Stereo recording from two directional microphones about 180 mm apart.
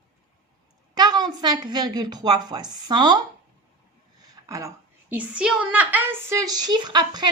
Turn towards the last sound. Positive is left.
turn(degrees=-25)  # may be behind; listen again after turning